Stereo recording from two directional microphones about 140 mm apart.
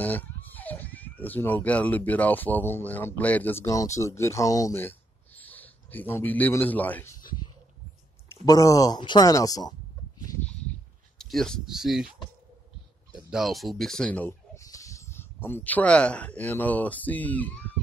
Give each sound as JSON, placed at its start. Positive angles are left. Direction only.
{"t": 0.0, "sound": "speech", "side_deg": 10}
{"t": 3.6, "sound": "speech", "side_deg": 25}
{"t": 7.2, "sound": "a sound", "side_deg": 30}
{"t": 8.3, "sound": "speech", "side_deg": 25}
{"t": 10.4, "sound": "a sound", "side_deg": 5}
{"t": 13.1, "sound": "speech", "side_deg": -5}
{"t": 14.6, "sound": "speech", "side_deg": 25}